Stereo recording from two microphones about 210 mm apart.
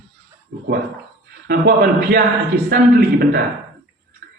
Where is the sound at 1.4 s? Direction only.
50° right (ahead or behind).